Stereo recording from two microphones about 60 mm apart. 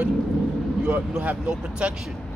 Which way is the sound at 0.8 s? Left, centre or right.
Right.